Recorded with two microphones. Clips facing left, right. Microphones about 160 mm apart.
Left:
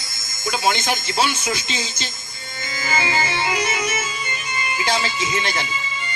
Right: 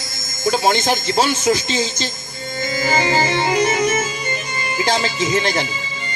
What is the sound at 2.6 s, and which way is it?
Music, 40° right (ahead or behind).